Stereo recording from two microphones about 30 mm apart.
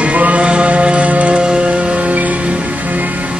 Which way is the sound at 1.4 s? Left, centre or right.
Right.